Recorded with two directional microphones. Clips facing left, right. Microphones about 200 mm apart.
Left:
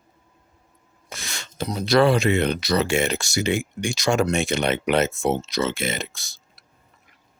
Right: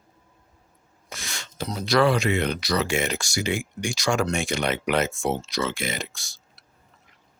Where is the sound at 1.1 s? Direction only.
25° left (ahead or behind).